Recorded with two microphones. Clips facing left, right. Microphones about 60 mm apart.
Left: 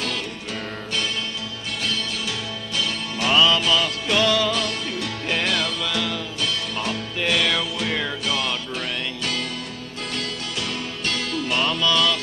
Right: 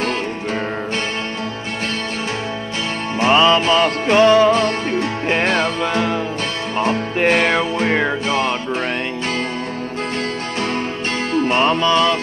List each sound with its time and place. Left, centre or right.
3.2 s music: right
11.3 s music: right